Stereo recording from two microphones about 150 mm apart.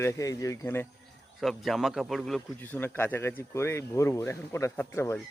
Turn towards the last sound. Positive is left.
turn(degrees=15)  # may be behind; listen again after turning